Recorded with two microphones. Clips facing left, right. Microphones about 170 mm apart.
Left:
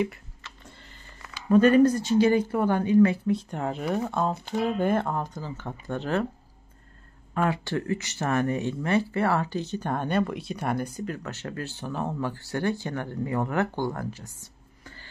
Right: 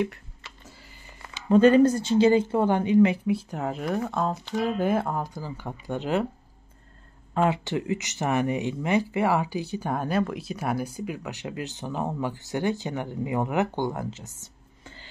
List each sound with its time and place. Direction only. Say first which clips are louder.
1.3 s a woman's voice: right 1 dB; 25° right (ahead or behind)
3.3 s speech: even; 5° right (ahead or behind)
7.3 s speech: right 2 dB; 20° right (ahead or behind)
14.4 s whispering: right 1 dB; 20° right (ahead or behind)